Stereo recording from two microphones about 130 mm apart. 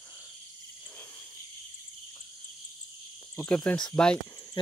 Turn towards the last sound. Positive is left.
turn(degrees=5)  # may be behind; listen again after turning